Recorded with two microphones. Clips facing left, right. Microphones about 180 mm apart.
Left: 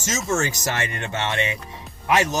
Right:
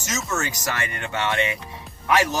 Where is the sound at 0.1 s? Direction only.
25° left (ahead or behind).